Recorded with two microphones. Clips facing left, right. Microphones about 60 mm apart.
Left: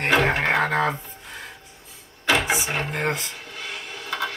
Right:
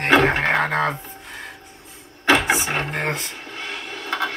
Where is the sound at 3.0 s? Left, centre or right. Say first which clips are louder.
Even; centre.